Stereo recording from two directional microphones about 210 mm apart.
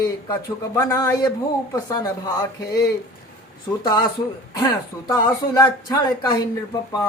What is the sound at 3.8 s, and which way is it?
Speech, 20° left (ahead or behind).